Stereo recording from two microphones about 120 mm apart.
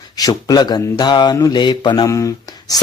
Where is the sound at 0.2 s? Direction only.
30° left (ahead or behind).